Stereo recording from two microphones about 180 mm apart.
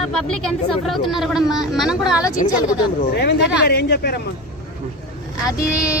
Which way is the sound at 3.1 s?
65° left (ahead or behind).